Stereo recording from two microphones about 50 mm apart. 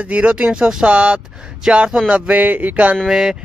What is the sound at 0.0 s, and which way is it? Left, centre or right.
Speech, right.